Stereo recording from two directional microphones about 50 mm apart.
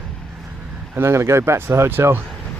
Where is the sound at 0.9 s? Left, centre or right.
Right.